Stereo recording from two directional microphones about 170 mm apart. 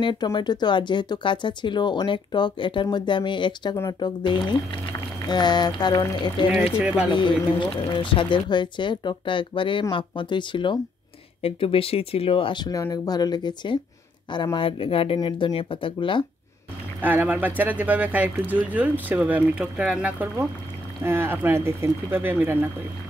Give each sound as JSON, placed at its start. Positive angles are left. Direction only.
{"t": 0.0, "sound": "speech", "side_deg": 25}
{"t": 3.7, "sound": "speech", "side_deg": 15}
{"t": 5.3, "sound": "speech", "side_deg": 25}
{"t": 17.0, "sound": "speech", "side_deg": -10}